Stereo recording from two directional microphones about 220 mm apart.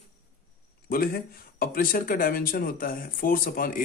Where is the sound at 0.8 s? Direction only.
40° left (ahead or behind).